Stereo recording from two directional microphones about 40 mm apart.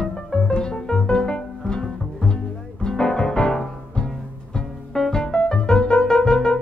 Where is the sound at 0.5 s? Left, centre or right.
Left.